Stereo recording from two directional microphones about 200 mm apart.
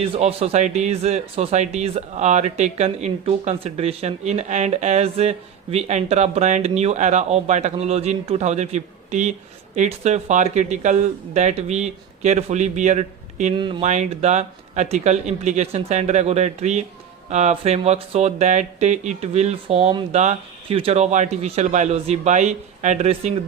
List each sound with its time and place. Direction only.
0.0 s speech: 30° right (ahead or behind)
13.6 s speech: 25° right (ahead or behind)
13.8 s speech: 35° right (ahead or behind)